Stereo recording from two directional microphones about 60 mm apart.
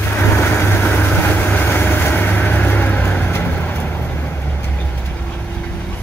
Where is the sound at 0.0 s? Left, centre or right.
Left.